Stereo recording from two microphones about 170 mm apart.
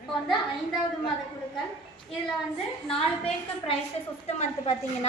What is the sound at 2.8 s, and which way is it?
A woman's voice, 35° left (ahead or behind).